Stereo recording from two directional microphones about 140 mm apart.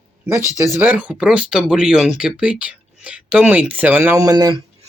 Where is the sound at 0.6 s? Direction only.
15° right (ahead or behind).